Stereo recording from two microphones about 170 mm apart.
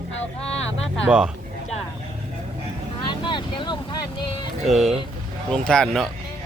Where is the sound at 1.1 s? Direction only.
5° right (ahead or behind).